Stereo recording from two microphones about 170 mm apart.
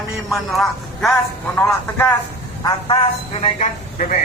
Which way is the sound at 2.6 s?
30° left (ahead or behind).